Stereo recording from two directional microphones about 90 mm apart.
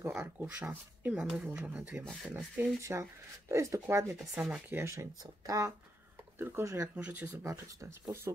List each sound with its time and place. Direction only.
0.0 s speech: 30° right (ahead or behind); by 2.7 s 10° right (ahead or behind)
2.8 s speech: 35° right (ahead or behind)
4.4 s speech: 20° right (ahead or behind)
4.9 s speech: 40° right (ahead or behind)
6.3 s speech: 25° right (ahead or behind)
7.0 s speech: 15° right (ahead or behind)
7.4 s speech: 40° right (ahead or behind)